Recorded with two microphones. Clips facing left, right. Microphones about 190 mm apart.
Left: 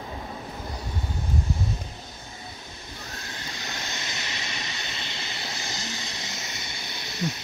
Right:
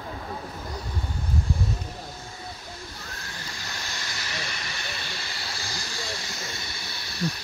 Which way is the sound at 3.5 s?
20° left (ahead or behind).